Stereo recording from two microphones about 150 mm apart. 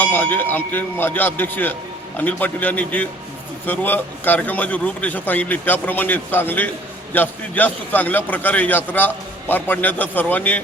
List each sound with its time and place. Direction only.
0.0 s a man's voice: 15° left (ahead or behind)